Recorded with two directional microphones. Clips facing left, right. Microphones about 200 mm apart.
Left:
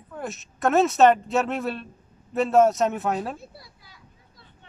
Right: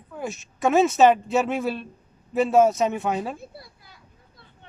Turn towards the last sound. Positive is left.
turn(degrees=-55)  # may be behind; listen again after turning